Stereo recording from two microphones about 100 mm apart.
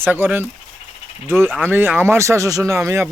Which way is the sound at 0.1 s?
20° right (ahead or behind).